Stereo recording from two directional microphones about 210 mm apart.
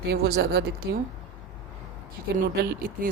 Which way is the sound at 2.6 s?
45° right (ahead or behind).